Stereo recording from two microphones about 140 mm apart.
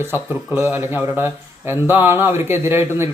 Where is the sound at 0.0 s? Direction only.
15° right (ahead or behind).